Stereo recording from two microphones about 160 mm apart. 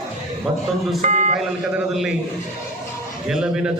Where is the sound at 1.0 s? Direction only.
50° right (ahead or behind).